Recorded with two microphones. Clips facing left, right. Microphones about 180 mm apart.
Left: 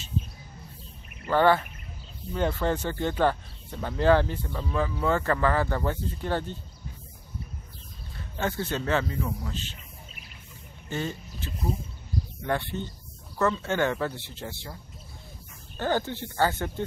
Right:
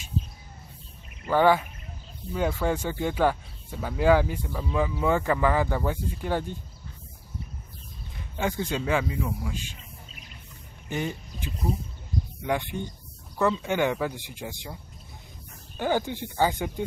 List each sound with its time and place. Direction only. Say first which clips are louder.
1.2 s speech: right 1 dB; 10° right (ahead or behind)
8.2 s speech: right 1 dB; 15° right (ahead or behind)
10.9 s speech: right 1 dB; 15° right (ahead or behind)
15.8 s speech: right 1 dB; 15° right (ahead or behind)